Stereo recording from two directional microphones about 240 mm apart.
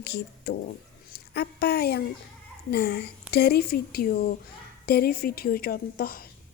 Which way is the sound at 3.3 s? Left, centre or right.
Left.